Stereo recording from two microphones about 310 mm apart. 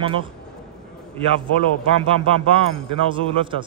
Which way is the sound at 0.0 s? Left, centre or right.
Centre.